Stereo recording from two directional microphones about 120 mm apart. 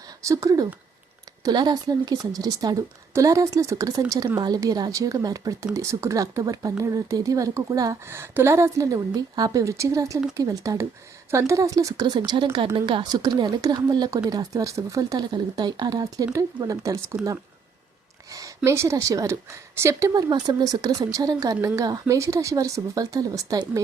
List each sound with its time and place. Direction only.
0.2 s a woman's voice: 25° right (ahead or behind)
18.3 s a woman's voice: 25° right (ahead or behind)